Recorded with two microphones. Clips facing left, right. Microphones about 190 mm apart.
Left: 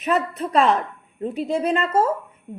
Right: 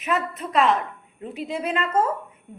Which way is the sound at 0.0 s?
35° left (ahead or behind).